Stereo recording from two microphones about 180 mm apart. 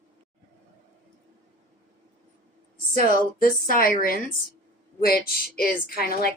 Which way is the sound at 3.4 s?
50° left (ahead or behind).